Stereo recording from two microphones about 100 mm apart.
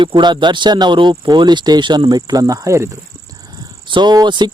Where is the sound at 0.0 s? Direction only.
50° right (ahead or behind); by 2.9 s 30° right (ahead or behind).